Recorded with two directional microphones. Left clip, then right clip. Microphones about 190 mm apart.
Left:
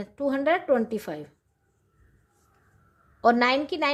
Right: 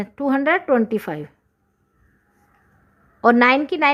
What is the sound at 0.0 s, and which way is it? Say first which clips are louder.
A woman's voice: right 5 dB; 45° right (ahead or behind).